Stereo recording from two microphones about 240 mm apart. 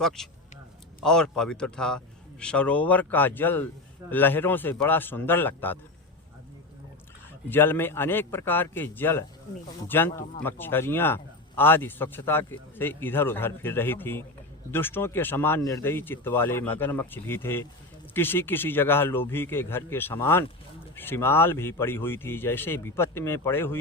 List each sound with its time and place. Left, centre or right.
0.2 s speech: centre
7.5 s speech: centre